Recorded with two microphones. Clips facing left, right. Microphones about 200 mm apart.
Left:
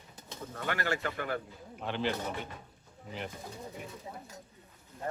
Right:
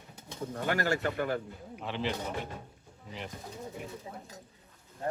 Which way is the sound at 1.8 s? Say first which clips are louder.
Left 1 dB; centre (ahead or behind).